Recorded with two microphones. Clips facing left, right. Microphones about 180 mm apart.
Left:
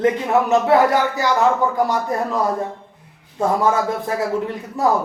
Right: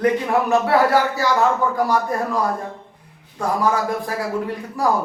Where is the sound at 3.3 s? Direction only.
25° left (ahead or behind).